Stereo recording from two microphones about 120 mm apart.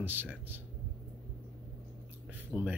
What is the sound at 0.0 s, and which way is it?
Speech, 15° right (ahead or behind).